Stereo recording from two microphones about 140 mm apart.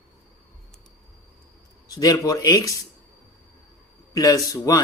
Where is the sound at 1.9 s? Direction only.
25° left (ahead or behind).